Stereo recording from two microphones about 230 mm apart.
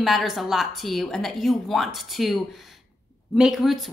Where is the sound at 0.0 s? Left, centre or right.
Centre.